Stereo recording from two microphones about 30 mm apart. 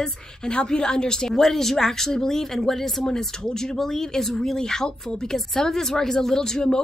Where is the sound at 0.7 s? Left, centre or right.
Left.